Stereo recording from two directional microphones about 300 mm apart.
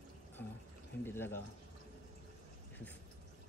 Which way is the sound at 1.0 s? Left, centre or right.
Centre.